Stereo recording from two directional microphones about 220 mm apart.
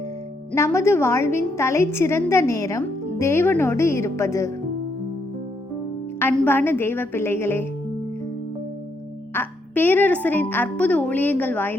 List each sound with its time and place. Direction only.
0.5 s a woman's voice: 10° left (ahead or behind)
6.1 s a woman's voice: 10° left (ahead or behind)
9.3 s a woman's voice: 10° left (ahead or behind)